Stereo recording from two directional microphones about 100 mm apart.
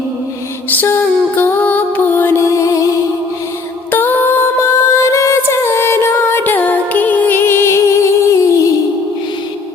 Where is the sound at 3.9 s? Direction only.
20° left (ahead or behind).